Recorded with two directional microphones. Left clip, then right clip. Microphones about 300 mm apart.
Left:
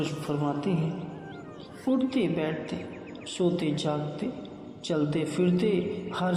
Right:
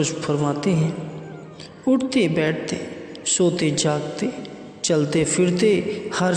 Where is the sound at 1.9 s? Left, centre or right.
Right.